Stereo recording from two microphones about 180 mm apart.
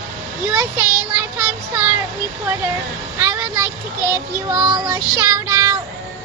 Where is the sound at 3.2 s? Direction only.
15° right (ahead or behind).